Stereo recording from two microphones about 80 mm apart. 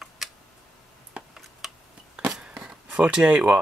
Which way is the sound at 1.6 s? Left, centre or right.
Centre.